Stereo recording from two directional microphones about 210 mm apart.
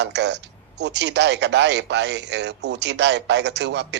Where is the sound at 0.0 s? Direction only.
55° right (ahead or behind).